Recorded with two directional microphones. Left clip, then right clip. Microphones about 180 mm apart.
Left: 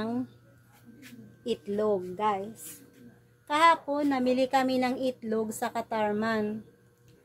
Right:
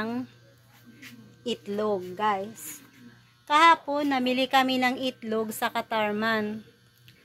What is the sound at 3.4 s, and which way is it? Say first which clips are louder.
A woman's voice: right 4 dB; 20° right (ahead or behind).